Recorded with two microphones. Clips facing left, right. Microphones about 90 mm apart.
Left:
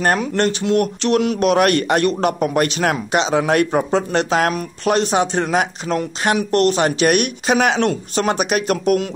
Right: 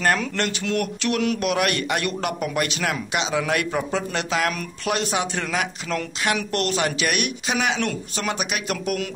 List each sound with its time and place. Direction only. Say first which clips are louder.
0.4 s speech: left 7 dB; 25° left (ahead or behind)